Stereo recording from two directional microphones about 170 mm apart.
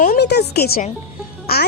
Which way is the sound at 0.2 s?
75° left (ahead or behind).